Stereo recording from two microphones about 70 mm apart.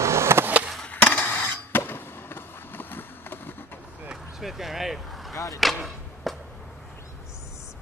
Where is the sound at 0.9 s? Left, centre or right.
Left.